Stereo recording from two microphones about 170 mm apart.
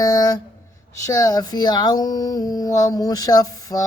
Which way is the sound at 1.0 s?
20° left (ahead or behind).